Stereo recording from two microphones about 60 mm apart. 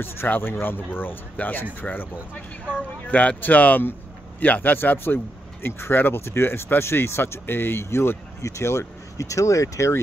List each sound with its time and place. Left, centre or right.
0.0 s speech: left
3.1 s speech: left
8.4 s speech: left
9.2 s speech: left